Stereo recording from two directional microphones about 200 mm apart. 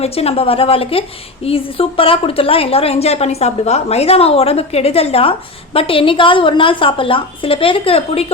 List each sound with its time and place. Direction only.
0.0 s a woman's voice: 30° left (ahead or behind)